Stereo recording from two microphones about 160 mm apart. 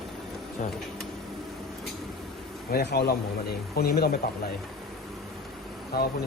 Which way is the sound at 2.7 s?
85° left.